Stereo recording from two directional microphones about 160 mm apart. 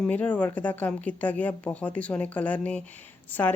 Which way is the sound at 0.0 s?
10° left (ahead or behind).